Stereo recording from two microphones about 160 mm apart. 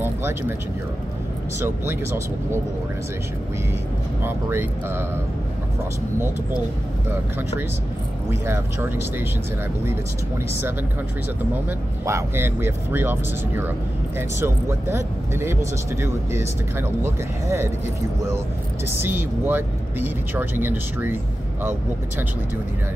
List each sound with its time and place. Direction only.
0.0 s speech: 15° right (ahead or behind)
1.6 s speech: 15° right (ahead or behind)
4.2 s speech: 15° right (ahead or behind)
7.1 s speech: 15° right (ahead or behind)
12.1 s speech: 15° right (ahead or behind)
18.9 s speech: 15° right (ahead or behind)